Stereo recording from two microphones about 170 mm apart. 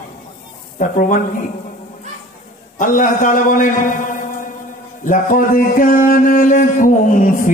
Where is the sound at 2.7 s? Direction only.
50° left (ahead or behind).